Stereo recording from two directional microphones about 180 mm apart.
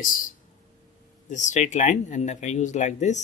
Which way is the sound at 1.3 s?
40° left (ahead or behind).